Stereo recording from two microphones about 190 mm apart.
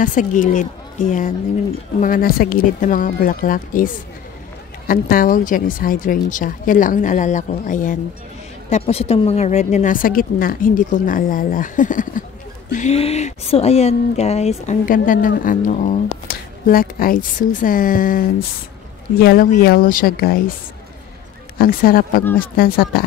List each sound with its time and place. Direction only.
0.0 s a woman's voice: 45° left (ahead or behind)
2.0 s a woman's voice: 45° left (ahead or behind)
21.5 s a woman's voice: 50° left (ahead or behind)